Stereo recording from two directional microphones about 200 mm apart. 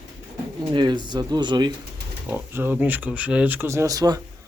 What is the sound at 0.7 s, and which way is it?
Speech, 20° right (ahead or behind).